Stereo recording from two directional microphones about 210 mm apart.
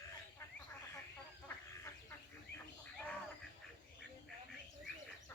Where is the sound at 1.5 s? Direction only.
10° left (ahead or behind).